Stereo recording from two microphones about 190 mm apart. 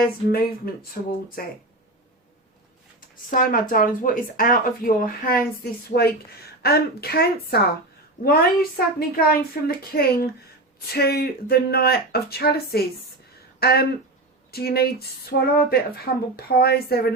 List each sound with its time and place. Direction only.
0.0 s speech: 50° left (ahead or behind)
3.2 s speech: 45° left (ahead or behind)
6.6 s speech: 55° left (ahead or behind)